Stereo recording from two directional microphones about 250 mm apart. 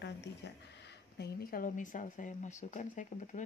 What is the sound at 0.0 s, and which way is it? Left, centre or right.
Speech, left.